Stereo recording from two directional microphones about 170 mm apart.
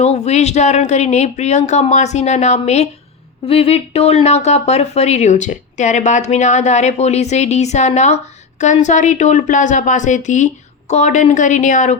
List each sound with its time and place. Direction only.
0.0 s speech: 40° left (ahead or behind)